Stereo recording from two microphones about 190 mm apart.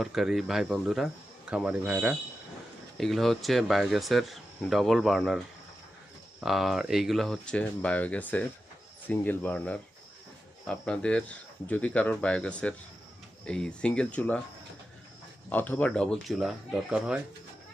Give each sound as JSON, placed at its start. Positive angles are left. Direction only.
{"t": 0.0, "sound": "speech", "side_deg": 0}
{"t": 6.4, "sound": "speech", "side_deg": 0}
{"t": 15.4, "sound": "speech", "side_deg": 10}